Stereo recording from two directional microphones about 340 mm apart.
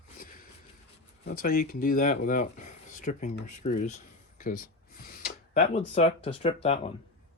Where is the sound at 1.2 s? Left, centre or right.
Left.